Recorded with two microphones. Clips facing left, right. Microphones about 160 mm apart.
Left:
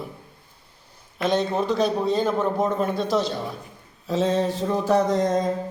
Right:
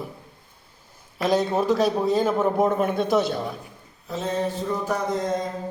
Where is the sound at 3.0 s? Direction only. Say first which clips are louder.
Right 2 dB; 55° right (ahead or behind).